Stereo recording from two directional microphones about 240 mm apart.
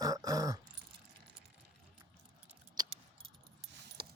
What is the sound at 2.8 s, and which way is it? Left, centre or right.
Keys jangling, centre.